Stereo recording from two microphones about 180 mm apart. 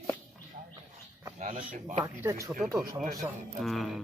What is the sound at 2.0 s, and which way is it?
Speech, 15° right (ahead or behind).